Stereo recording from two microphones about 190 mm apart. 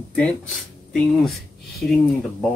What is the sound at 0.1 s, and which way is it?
Speech, 5° left (ahead or behind).